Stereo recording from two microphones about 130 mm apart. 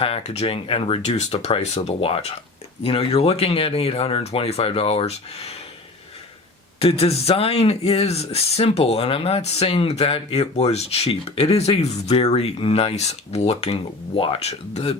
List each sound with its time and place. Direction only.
0.0 s speech: 55° left (ahead or behind)
6.7 s speech: 50° left (ahead or behind)